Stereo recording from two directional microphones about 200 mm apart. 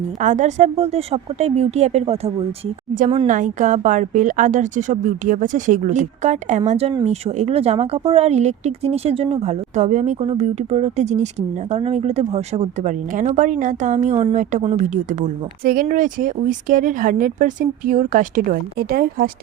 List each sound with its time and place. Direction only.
0.2 s speech: 40° right (ahead or behind)